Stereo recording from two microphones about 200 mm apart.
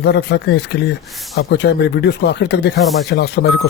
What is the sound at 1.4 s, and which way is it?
Speech, 55° left (ahead or behind).